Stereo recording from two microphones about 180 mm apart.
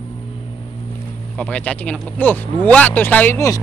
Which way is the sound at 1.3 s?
5° left (ahead or behind).